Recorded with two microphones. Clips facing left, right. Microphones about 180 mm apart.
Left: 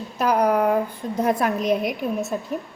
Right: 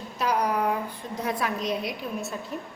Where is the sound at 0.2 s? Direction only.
50° left (ahead or behind).